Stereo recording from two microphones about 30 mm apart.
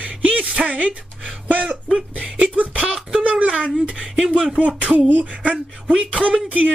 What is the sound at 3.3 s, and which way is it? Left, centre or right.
Speech, right.